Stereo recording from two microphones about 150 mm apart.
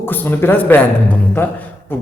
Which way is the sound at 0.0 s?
15° left (ahead or behind).